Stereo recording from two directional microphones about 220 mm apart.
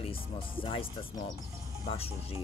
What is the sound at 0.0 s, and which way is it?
Speech, 25° left (ahead or behind).